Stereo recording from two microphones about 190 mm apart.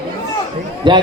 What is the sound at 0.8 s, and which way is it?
Speech, 25° right (ahead or behind).